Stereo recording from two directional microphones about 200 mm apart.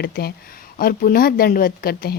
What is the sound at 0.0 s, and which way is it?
A woman's voice, 50° left (ahead or behind).